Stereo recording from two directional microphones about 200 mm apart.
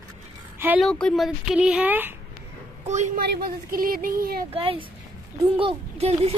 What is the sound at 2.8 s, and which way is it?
Speech, 35° right (ahead or behind).